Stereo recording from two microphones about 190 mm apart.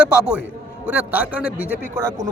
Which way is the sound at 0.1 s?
5° right (ahead or behind).